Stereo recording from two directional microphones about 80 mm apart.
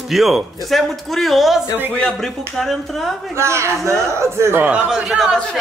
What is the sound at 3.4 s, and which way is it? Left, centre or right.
Speech, right.